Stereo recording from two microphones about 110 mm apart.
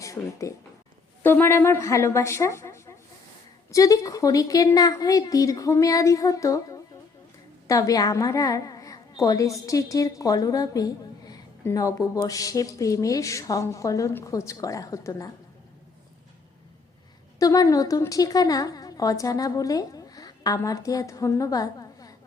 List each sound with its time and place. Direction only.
0.0 s a woman's voice: 30° left (ahead or behind)
17.4 s a woman's voice: 30° left (ahead or behind)